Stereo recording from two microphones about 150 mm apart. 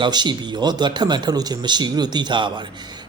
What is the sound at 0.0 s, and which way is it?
A man's voice, 30° right (ahead or behind).